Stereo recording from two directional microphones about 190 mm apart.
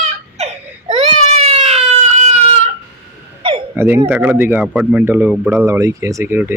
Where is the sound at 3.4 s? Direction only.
25° right (ahead or behind).